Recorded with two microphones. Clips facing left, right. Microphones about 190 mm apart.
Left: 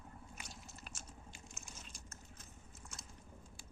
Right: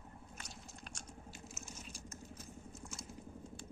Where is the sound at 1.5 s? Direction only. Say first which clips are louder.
Right 5 dB; 10° right (ahead or behind).